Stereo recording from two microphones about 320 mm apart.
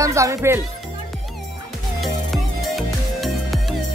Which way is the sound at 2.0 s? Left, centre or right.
Centre.